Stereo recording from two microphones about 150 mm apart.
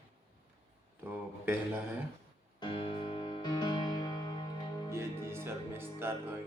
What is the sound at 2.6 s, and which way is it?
Music, 30° left (ahead or behind).